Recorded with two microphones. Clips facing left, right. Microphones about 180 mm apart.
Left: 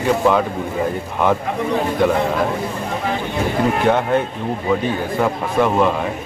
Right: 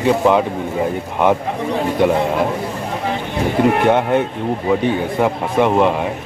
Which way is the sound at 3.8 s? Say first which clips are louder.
Right 2 dB; 20° right (ahead or behind).